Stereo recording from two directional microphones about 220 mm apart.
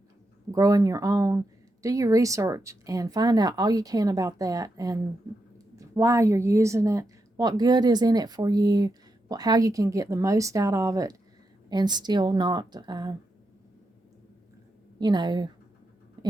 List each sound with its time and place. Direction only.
0.5 s a woman's voice: 15° right (ahead or behind)
14.9 s speech: 20° right (ahead or behind)